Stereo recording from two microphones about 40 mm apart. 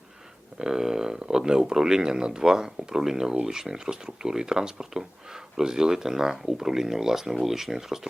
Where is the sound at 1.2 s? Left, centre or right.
Centre.